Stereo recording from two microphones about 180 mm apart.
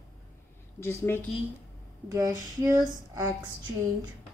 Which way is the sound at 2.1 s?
20° right (ahead or behind).